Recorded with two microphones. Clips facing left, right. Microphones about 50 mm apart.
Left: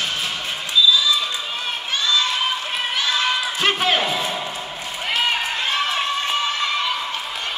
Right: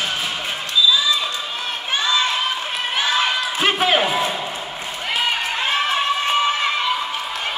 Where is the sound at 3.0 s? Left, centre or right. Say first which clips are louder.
Right 2 dB; centre.